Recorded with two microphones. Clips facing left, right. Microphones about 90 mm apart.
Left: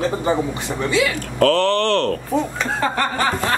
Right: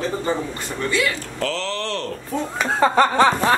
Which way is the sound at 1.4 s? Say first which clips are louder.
Left 10 dB; 60° left (ahead or behind).